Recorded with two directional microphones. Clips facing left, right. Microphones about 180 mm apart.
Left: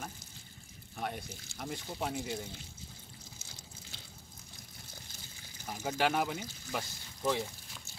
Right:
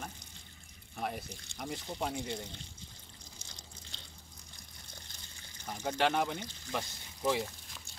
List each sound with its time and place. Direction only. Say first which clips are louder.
0.9 s speech: right 1 dB; centre (ahead or behind)
3.4 s water: left 1 dB; 5° left (ahead or behind)
5.7 s speech: even; 5° left (ahead or behind)
7.2 s a sound: right 1 dB; centre (ahead or behind)